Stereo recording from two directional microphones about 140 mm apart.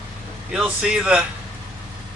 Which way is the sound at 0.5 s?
5° right (ahead or behind).